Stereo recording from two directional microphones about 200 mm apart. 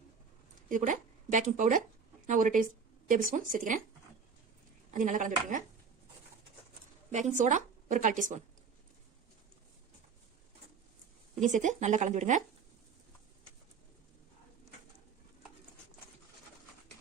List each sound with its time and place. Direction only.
0.7 s speech: 40° right (ahead or behind)
4.9 s speech: 40° right (ahead or behind)
7.1 s a woman's voice: 35° right (ahead or behind)
11.4 s speech: 40° right (ahead or behind)